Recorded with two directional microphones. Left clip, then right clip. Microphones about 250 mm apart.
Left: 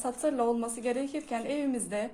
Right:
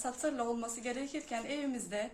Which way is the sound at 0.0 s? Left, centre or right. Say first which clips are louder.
Left 7 dB; centre.